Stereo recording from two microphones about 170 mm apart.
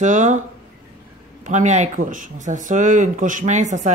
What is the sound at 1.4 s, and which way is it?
Speech, 45° right (ahead or behind).